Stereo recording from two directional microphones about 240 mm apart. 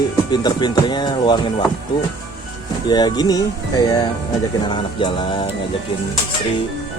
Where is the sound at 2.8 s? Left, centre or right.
Centre.